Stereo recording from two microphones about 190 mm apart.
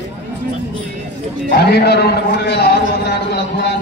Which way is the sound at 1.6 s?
60° left (ahead or behind).